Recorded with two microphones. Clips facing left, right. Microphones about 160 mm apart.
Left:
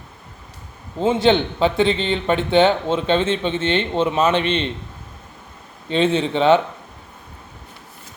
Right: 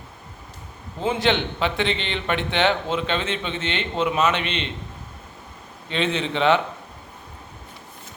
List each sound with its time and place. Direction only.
1.0 s a man's voice: 30° left (ahead or behind)
5.9 s a man's voice: 30° left (ahead or behind)